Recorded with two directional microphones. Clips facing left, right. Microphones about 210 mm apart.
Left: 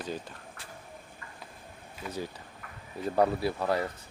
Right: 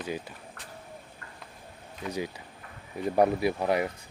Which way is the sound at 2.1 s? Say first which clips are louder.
Right 3 dB; 15° right (ahead or behind).